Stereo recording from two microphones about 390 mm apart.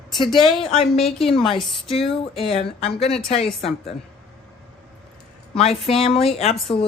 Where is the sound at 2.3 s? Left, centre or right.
Centre.